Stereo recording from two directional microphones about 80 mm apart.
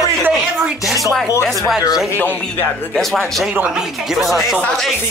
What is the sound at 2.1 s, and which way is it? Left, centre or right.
Speech, left.